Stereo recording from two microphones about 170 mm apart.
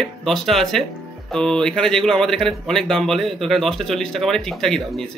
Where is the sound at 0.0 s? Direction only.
Centre (ahead or behind).